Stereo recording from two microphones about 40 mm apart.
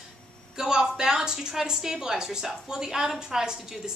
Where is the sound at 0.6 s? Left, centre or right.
Centre.